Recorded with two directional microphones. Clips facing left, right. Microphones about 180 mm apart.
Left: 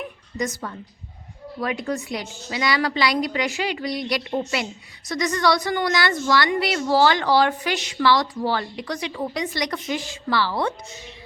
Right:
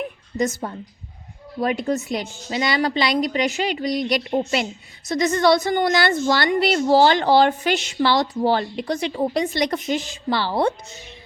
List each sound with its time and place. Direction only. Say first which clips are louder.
0.3 s a woman's voice: right 4 dB; 25° right (ahead or behind)